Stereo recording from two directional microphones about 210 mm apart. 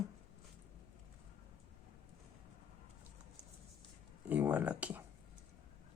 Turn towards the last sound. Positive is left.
turn(degrees=-5)  # may be behind; listen again after turning